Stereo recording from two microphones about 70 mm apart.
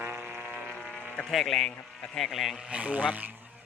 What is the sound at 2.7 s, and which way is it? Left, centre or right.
Speech, centre.